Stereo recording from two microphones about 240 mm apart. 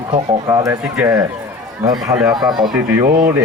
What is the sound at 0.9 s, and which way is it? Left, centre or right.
Speech, centre.